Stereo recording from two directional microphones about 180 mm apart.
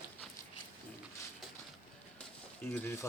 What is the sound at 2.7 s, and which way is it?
Speech, 15° left (ahead or behind).